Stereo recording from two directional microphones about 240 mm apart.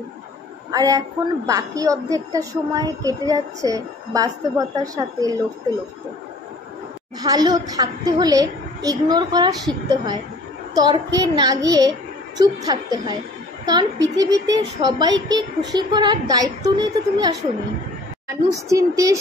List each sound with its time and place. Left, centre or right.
0.7 s a woman's voice: centre
7.2 s a woman's voice: centre